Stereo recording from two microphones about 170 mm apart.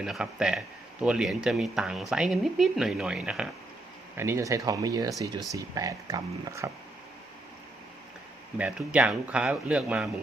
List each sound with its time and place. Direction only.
0.0 s speech: 5° right (ahead or behind)
4.2 s speech: 15° right (ahead or behind)
8.5 s speech: 10° right (ahead or behind)